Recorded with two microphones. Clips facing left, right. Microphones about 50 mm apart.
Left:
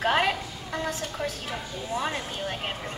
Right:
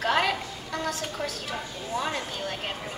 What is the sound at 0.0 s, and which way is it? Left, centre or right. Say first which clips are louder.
A woman's voice: left 1 dB; centre.